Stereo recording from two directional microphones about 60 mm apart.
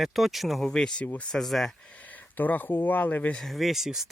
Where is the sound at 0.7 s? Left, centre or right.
Centre.